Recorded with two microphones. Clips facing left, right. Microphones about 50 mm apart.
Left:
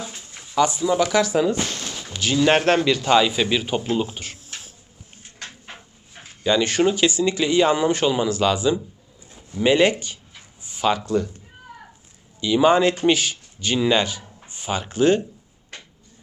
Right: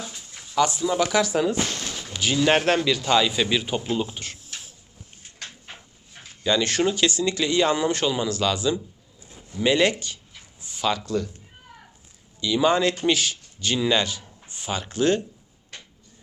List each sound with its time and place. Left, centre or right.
0.3 s speech: centre
5.4 s a sound: left
6.1 s speech: centre
12.4 s speech: centre